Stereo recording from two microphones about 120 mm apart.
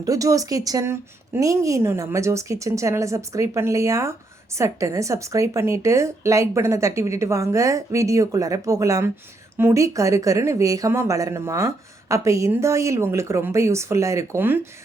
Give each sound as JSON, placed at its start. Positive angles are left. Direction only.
{"t": 0.0, "sound": "speech", "side_deg": -30}